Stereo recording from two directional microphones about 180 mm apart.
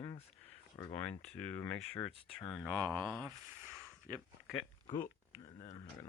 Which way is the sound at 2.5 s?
Centre (ahead or behind).